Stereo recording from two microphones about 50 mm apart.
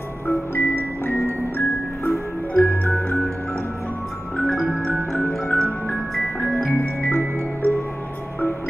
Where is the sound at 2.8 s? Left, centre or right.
Left.